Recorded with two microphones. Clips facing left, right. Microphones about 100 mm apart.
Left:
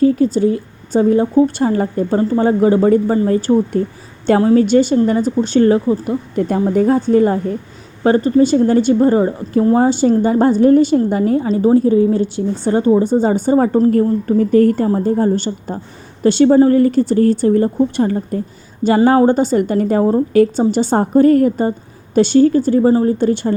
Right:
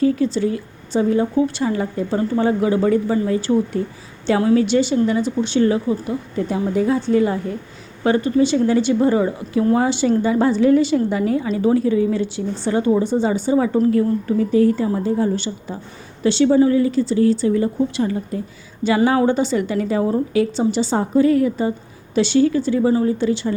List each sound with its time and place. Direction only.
0.0 s a woman's voice: 40° left (ahead or behind)
13.7 s a woman's voice: 35° left (ahead or behind)
20.3 s a woman's voice: 50° left (ahead or behind)
23.1 s a woman's voice: 50° left (ahead or behind)